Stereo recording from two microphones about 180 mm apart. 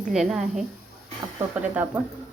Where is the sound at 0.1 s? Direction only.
5° right (ahead or behind).